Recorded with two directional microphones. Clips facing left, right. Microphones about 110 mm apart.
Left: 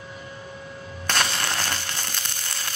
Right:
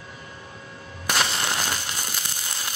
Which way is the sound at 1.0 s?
5° right (ahead or behind).